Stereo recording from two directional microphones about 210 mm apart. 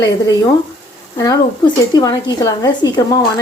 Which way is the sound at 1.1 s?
20° left (ahead or behind).